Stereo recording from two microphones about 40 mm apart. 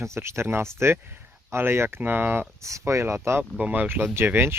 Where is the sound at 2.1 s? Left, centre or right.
Right.